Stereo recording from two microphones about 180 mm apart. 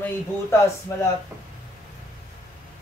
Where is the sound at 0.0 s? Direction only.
10° left (ahead or behind).